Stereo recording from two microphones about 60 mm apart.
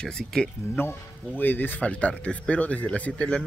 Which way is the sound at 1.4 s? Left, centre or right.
Left.